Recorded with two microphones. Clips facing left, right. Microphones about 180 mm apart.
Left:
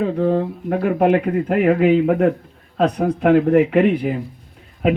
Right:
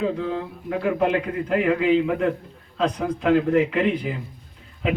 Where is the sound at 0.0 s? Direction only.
55° left (ahead or behind).